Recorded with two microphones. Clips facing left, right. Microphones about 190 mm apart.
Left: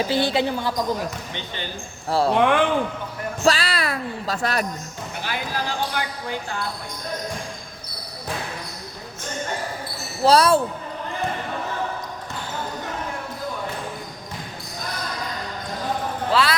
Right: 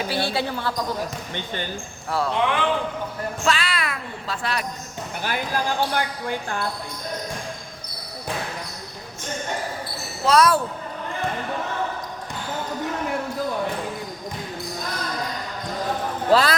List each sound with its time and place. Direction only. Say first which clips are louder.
0.1 s speech: left 4 dB; 20° left (ahead or behind)
2.0 s speech: left 4 dB; 30° left (ahead or behind)
2.3 s speech: left 6 dB; 55° left (ahead or behind)
3.4 s a sound: left 4 dB; 35° left (ahead or behind)
5.2 s speech: right 3 dB; 50° right (ahead or behind)
10.2 s speech: left 2 dB; 30° left (ahead or behind)
16.3 s a man's voice: right 3 dB; 40° right (ahead or behind)